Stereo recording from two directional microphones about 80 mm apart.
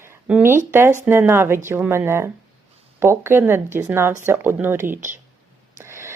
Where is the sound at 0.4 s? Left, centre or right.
Right.